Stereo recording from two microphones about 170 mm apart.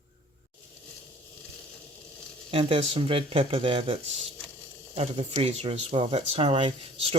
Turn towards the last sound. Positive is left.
turn(degrees=-35)  # may be behind; listen again after turning